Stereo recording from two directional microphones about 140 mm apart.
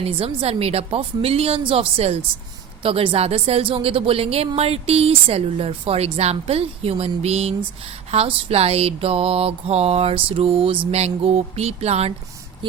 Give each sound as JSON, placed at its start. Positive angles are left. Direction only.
{"t": 0.0, "sound": "a woman's voice", "side_deg": -45}